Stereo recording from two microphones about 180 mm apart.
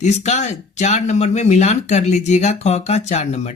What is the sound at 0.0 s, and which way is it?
Speech, 40° left (ahead or behind).